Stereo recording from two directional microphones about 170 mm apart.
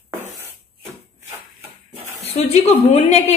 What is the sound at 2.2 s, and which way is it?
A woman's voice, 35° left (ahead or behind).